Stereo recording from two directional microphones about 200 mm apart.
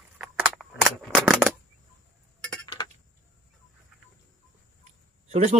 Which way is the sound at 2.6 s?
25° left (ahead or behind).